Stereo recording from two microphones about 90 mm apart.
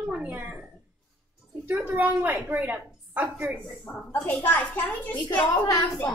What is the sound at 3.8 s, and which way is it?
A woman's voice, 15° left (ahead or behind).